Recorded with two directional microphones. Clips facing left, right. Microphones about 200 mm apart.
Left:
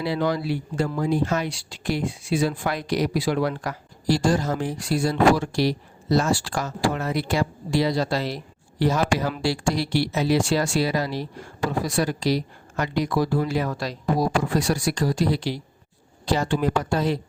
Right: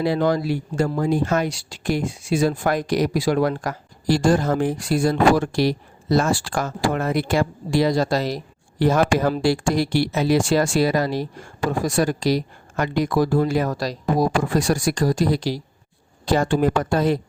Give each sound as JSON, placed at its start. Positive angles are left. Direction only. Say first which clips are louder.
{"t": 0.0, "sound": "speech", "louder": "right 4 dB", "side_deg": -50}